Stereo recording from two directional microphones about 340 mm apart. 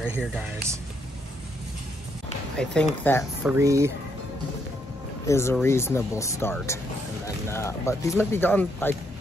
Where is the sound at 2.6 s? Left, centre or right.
Centre.